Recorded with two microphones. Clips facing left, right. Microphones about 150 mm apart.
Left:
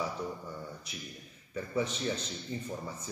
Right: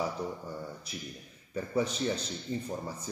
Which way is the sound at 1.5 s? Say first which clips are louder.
Right 2 dB; 40° right (ahead or behind).